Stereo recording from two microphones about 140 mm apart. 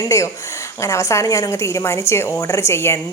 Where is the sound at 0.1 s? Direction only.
20° left (ahead or behind).